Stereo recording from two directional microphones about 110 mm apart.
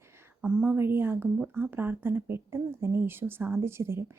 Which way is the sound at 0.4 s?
10° right (ahead or behind).